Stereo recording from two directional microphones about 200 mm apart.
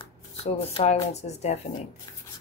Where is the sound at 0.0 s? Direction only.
30° left (ahead or behind).